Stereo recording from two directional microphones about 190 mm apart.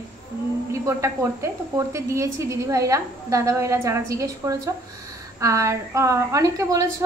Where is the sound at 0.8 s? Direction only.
15° right (ahead or behind).